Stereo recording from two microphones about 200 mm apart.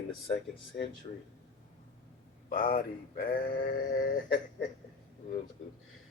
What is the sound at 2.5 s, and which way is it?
Speech, 45° left (ahead or behind).